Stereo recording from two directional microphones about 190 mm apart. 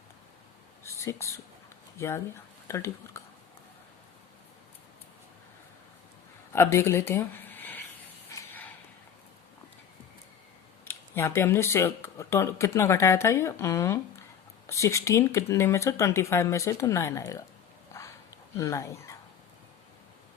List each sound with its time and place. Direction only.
0.9 s speech: 15° left (ahead or behind)
6.5 s speech: 15° left (ahead or behind)
8.3 s a sound: 15° left (ahead or behind)
10.8 s speech: 15° left (ahead or behind)
18.5 s speech: 15° left (ahead or behind)